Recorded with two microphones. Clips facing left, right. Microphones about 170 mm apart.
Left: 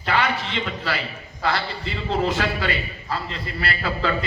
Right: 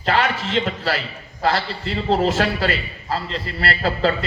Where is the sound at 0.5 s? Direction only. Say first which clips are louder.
Right 5 dB; 40° right (ahead or behind).